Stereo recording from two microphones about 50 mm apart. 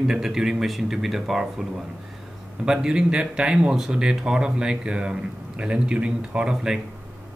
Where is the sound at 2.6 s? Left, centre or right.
Centre.